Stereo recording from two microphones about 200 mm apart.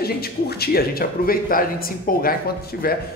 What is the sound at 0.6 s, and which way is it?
A man's voice, 50° left (ahead or behind).